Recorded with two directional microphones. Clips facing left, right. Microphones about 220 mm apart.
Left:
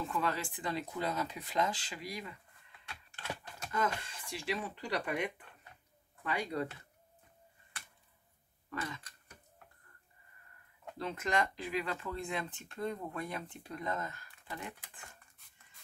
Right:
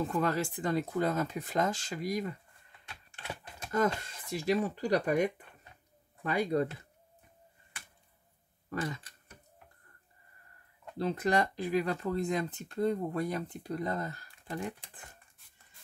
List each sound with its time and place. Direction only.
0.0 s speech: 45° right (ahead or behind)
3.7 s speech: 40° right (ahead or behind)
8.6 s speech: 40° right (ahead or behind)
11.0 s speech: 35° right (ahead or behind)